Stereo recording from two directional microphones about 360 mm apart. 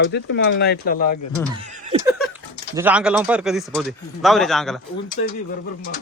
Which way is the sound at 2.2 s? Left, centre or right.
Centre.